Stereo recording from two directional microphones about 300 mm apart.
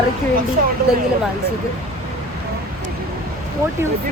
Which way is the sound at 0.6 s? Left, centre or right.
Right.